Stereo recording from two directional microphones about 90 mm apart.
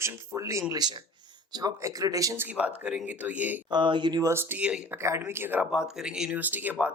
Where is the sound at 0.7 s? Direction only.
50° right (ahead or behind).